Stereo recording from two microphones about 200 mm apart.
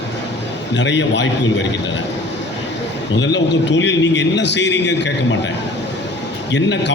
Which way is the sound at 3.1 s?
60° left (ahead or behind).